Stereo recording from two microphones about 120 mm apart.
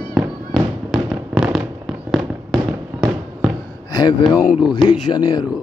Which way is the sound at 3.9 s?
35° left (ahead or behind).